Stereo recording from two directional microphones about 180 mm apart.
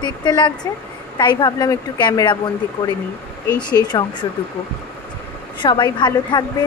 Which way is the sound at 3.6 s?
25° left (ahead or behind).